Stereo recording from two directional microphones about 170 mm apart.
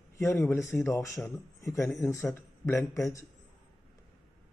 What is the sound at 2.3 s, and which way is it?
Speech, 15° left (ahead or behind).